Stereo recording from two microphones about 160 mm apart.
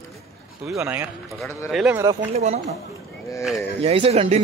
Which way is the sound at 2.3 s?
45° right (ahead or behind).